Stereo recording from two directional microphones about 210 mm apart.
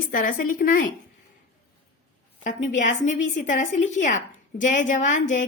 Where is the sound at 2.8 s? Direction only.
35° left (ahead or behind).